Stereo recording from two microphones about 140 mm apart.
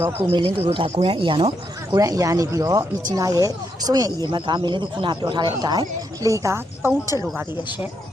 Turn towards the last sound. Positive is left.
turn(degrees=-20)  # may be behind; listen again after turning